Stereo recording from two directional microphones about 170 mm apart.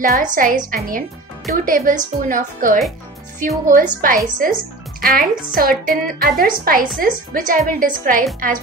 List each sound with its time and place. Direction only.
0.0 s a woman's voice: 55° right (ahead or behind)